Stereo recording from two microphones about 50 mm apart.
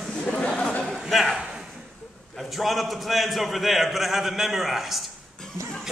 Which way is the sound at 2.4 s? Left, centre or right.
Centre.